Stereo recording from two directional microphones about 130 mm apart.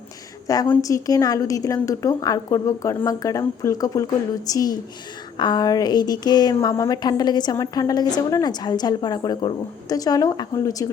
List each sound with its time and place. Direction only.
0.4 s a woman's voice: 30° left (ahead or behind)